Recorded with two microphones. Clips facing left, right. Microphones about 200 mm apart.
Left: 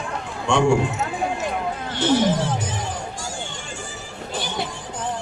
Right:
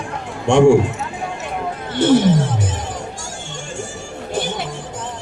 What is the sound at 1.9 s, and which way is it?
Speech, 50° right (ahead or behind).